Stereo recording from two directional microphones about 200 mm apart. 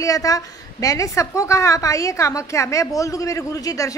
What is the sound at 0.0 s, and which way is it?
A woman's voice, 15° left (ahead or behind).